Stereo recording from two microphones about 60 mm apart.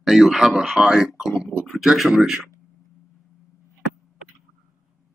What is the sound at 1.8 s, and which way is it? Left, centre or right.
Speech, centre.